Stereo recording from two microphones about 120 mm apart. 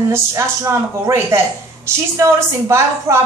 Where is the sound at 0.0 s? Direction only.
25° right (ahead or behind).